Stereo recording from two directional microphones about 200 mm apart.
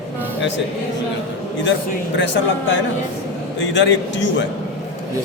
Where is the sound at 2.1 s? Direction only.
65° left (ahead or behind).